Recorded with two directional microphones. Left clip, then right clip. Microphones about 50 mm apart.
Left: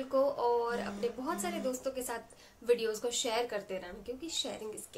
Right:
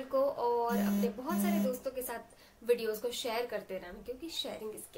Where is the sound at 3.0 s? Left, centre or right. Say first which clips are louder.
Left 2 dB; left.